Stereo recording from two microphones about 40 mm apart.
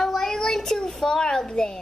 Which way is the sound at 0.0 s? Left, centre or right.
Centre.